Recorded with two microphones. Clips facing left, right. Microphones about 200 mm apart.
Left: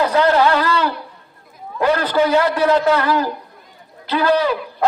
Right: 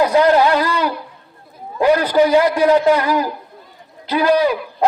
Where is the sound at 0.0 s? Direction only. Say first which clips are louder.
Right 2 dB; 10° right (ahead or behind).